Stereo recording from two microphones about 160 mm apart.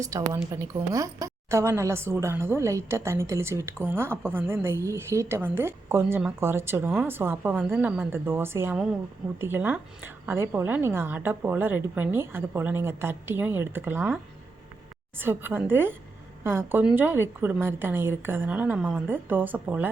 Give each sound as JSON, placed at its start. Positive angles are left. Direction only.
{"t": 0.0, "sound": "a woman's voice", "side_deg": -20}
{"t": 15.2, "sound": "a woman's voice", "side_deg": -15}